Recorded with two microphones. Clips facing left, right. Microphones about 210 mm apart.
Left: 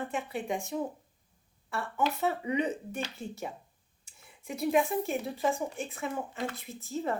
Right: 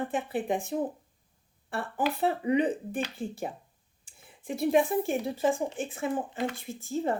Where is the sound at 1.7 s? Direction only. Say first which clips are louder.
Right 1 dB; 35° right (ahead or behind).